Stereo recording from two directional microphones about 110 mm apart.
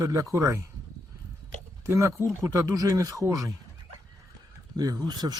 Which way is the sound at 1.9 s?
25° right (ahead or behind).